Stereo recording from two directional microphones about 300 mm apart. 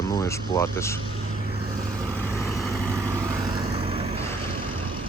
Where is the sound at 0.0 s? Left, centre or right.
Centre.